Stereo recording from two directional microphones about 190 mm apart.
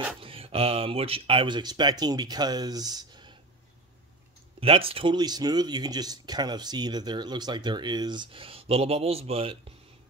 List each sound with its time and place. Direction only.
0.2 s speech: 30° right (ahead or behind)
4.6 s speech: 30° right (ahead or behind)